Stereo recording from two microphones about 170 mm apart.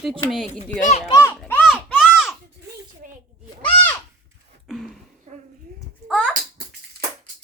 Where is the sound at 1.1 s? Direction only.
15° left (ahead or behind).